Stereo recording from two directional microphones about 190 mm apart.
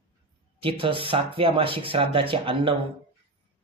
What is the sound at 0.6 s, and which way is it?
Speech, 30° right (ahead or behind).